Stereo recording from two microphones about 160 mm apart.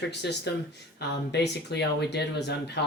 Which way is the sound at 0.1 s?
90° left.